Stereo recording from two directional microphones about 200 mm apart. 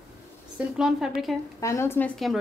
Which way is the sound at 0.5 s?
5° right (ahead or behind).